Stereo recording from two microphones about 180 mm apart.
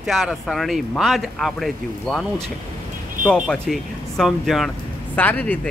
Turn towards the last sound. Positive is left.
turn(degrees=10)  # may be behind; listen again after turning